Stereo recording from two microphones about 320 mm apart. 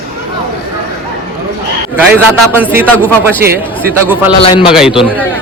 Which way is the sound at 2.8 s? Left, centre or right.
Centre.